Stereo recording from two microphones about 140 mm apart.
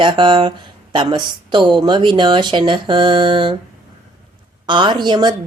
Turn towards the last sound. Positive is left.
turn(degrees=-30)  # may be behind; listen again after turning